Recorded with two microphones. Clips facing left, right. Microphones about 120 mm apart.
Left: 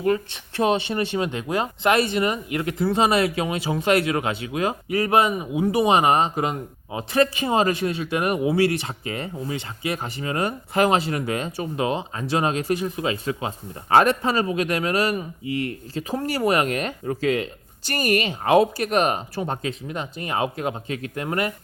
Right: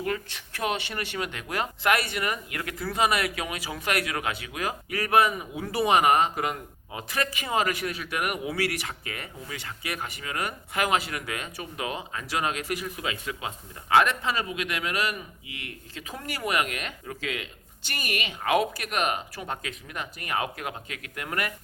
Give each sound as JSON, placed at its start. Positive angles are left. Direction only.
{"t": 0.0, "sound": "speech", "side_deg": 25}